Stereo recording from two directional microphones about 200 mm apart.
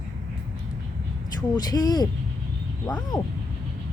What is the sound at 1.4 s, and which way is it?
Speech, 20° left (ahead or behind).